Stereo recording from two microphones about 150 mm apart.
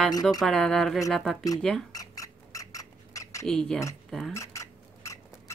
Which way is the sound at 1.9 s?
25° left (ahead or behind).